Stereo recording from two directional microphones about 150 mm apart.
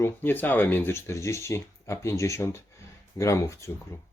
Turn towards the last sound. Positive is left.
turn(degrees=20)  # may be behind; listen again after turning